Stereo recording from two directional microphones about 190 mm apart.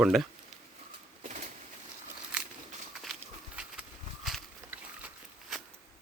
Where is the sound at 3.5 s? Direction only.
5° right (ahead or behind).